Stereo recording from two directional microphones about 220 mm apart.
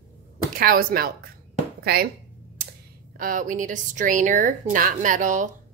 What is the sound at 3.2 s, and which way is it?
Speech, 40° right (ahead or behind).